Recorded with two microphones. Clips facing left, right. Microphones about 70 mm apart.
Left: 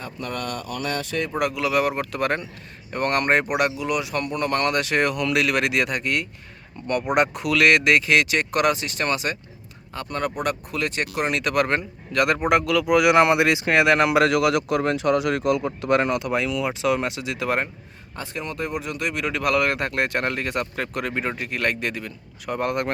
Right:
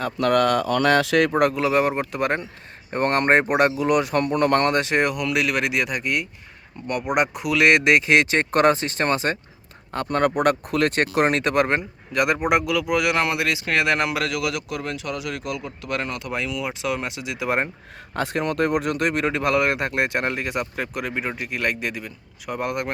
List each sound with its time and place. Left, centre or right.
0.0 s speech: right
1.4 s speech: right
9.9 s speech: right; by 12.8 s centre
12.8 s speech: centre
13.1 s speech: left
13.8 s speech: centre
14.3 s speech: left
16.0 s speech: centre
16.3 s speech: centre
18.1 s speech: right
19.3 s speech: right; by 22.9 s centre